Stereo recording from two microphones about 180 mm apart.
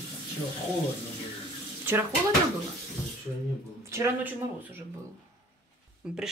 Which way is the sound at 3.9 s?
15° right (ahead or behind).